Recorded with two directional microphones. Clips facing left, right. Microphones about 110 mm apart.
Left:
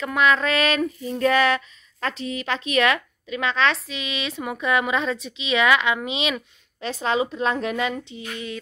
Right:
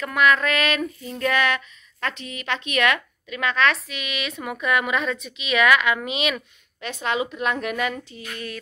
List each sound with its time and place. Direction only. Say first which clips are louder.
0.0 s female singing: even; 25° left (ahead or behind)